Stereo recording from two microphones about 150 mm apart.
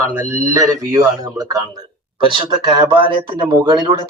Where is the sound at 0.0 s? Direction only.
20° right (ahead or behind).